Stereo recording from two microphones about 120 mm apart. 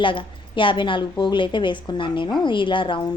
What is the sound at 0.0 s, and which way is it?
A woman's voice, 45° left (ahead or behind).